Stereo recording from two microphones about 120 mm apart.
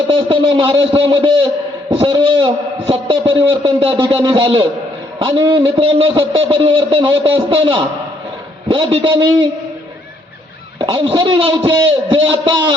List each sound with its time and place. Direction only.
0.1 s a man's voice: 45° right (ahead or behind)
10.8 s a man's voice: 45° right (ahead or behind)